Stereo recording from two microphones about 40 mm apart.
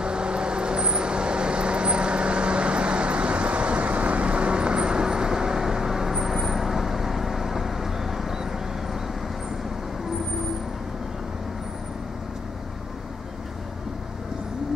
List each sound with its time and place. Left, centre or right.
0.0 s vehicle: right